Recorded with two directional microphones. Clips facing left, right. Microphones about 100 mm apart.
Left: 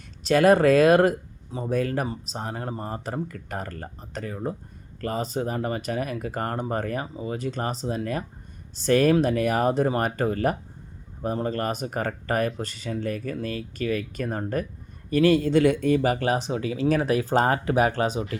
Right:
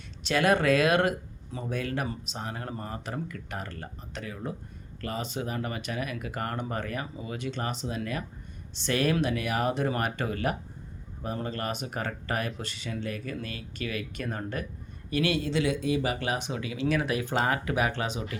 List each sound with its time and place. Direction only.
0.2 s speech: 40° left (ahead or behind)